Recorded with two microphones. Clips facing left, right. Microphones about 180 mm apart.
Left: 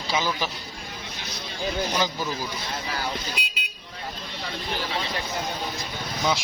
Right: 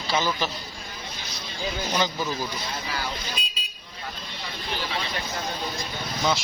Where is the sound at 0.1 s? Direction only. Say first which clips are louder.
Right 1 dB; 10° left (ahead or behind).